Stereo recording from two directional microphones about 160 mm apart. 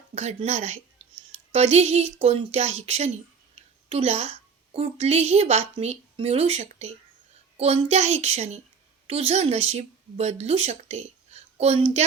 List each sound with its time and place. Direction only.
0.1 s a woman's voice: 45° right (ahead or behind)